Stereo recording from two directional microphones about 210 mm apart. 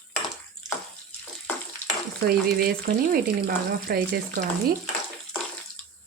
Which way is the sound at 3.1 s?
45° right (ahead or behind).